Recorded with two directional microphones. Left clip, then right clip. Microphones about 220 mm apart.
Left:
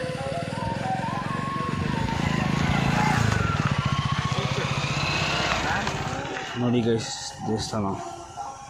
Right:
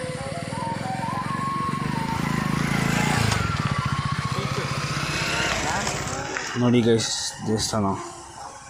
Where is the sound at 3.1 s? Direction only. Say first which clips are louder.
Right 2 dB; 25° right (ahead or behind).